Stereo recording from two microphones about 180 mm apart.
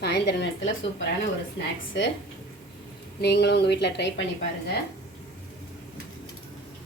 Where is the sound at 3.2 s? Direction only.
65° left (ahead or behind).